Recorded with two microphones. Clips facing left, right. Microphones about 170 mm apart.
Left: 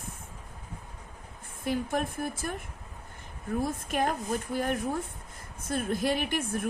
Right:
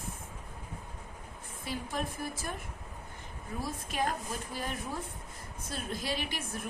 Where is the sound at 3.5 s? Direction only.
55° left (ahead or behind).